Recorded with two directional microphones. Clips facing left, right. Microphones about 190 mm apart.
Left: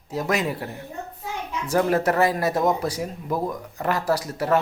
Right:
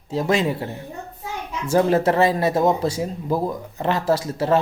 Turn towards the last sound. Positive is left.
turn(degrees=-25)  # may be behind; listen again after turning